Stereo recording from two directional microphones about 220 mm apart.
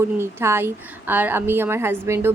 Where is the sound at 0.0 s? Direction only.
10° right (ahead or behind).